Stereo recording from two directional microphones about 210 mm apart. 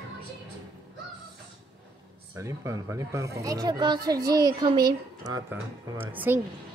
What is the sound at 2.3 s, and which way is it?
Speech, 15° right (ahead or behind).